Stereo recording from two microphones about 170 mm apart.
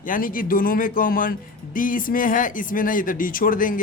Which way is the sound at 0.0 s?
55° left (ahead or behind).